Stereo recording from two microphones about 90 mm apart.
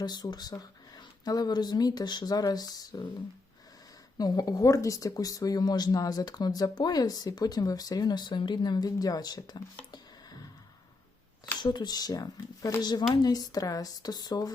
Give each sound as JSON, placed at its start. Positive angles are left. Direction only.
{"t": 0.0, "sound": "speech", "side_deg": 50}
{"t": 4.2, "sound": "speech", "side_deg": 45}
{"t": 9.9, "sound": "a sound", "side_deg": 45}
{"t": 11.6, "sound": "speech", "side_deg": 55}